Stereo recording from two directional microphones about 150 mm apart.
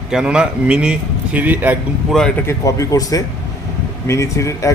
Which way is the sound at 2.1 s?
Centre (ahead or behind).